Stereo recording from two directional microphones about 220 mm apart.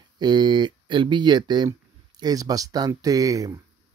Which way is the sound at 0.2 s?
20° right (ahead or behind).